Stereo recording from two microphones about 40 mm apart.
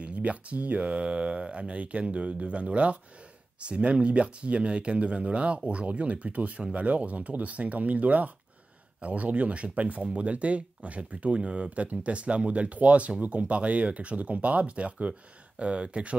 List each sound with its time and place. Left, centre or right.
0.0 s speech: right